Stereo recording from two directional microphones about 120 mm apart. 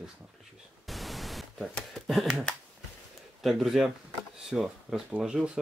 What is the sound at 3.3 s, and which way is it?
Speech, centre (ahead or behind).